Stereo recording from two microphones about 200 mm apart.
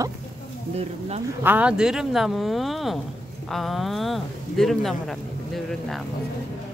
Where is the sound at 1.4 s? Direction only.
5° right (ahead or behind).